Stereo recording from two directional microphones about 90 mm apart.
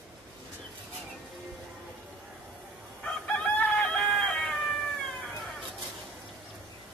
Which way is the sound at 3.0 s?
15° left (ahead or behind).